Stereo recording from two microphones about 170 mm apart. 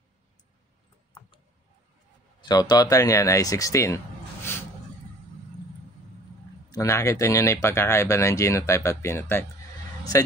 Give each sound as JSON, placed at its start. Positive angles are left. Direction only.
{"t": 2.4, "sound": "speech", "side_deg": 25}
{"t": 6.7, "sound": "speech", "side_deg": 20}